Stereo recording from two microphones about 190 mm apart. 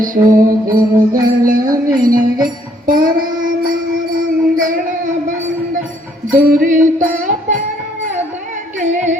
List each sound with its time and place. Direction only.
0.3 s music: 45° right (ahead or behind)
6.3 s music: 40° right (ahead or behind)